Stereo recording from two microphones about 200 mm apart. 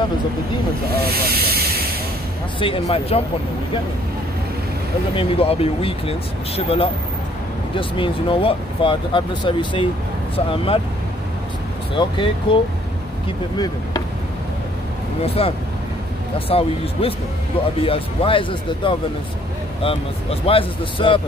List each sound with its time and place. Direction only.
0.8 s hiss: 50° right (ahead or behind)
2.6 s speech: 30° left (ahead or behind)
5.1 s speech: 30° left (ahead or behind)
11.9 s speech: 25° left (ahead or behind)
15.2 s speech: 30° left (ahead or behind)